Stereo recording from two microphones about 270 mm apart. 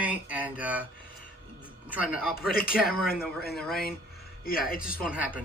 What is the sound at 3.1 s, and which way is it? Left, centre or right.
Speech, left.